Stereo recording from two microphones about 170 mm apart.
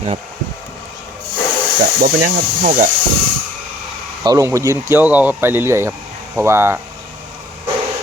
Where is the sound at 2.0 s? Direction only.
55° right (ahead or behind).